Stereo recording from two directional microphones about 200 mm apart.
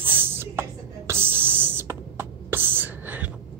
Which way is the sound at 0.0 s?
10° right (ahead or behind).